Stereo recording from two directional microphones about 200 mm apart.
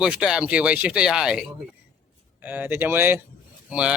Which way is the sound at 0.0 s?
5° right (ahead or behind).